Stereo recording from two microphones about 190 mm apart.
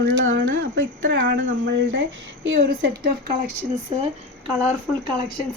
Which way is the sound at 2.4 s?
65° right (ahead or behind).